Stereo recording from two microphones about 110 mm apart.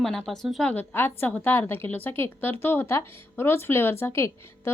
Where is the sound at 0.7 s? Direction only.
15° left (ahead or behind).